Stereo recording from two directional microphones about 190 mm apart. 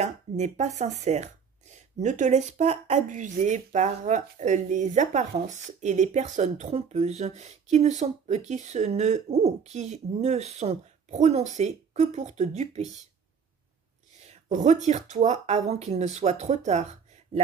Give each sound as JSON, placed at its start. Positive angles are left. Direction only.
{"t": 0.0, "sound": "speech", "side_deg": -40}
{"t": 14.2, "sound": "speech", "side_deg": -40}